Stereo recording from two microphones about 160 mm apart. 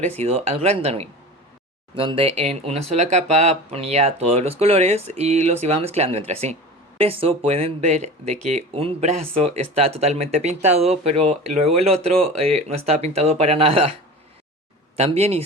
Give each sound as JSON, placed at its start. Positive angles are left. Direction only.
{"t": 0.0, "sound": "speech", "side_deg": -45}
{"t": 14.9, "sound": "speech", "side_deg": -40}